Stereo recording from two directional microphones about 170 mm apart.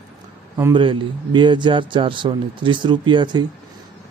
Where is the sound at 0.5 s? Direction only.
25° right (ahead or behind).